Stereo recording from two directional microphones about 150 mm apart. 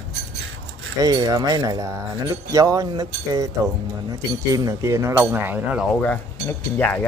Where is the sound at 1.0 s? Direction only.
25° right (ahead or behind).